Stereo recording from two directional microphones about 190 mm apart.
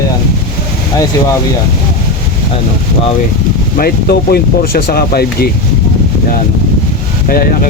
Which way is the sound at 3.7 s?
50° left (ahead or behind).